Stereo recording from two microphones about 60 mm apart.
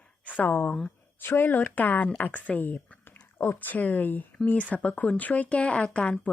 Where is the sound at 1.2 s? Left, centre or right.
Left.